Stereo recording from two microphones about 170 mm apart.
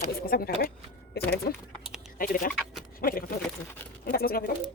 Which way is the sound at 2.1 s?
55° left (ahead or behind).